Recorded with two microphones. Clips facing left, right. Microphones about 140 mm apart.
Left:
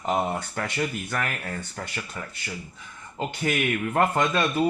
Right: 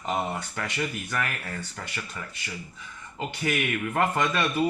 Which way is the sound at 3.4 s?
40° left (ahead or behind).